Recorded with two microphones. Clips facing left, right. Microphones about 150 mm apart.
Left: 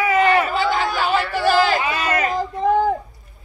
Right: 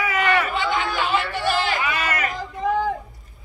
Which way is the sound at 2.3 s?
40° left (ahead or behind).